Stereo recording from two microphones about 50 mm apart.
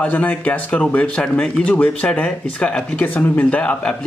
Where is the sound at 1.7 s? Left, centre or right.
Left.